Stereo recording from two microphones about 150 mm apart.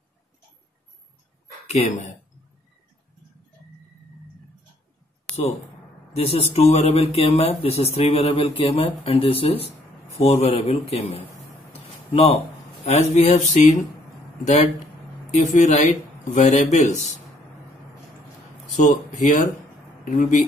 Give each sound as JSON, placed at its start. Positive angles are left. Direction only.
{"t": 5.3, "sound": "a sound", "side_deg": 5}
{"t": 6.1, "sound": "speech", "side_deg": 45}
{"t": 18.8, "sound": "speech", "side_deg": 55}